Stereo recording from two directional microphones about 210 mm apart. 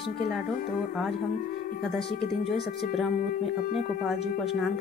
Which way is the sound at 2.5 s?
Centre (ahead or behind).